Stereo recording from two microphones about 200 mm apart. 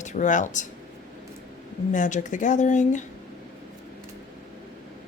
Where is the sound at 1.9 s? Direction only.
35° left (ahead or behind).